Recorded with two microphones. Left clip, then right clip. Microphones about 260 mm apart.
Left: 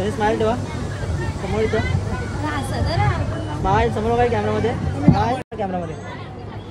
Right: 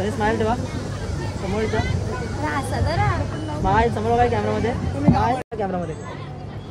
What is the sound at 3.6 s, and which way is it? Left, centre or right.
Speech, right.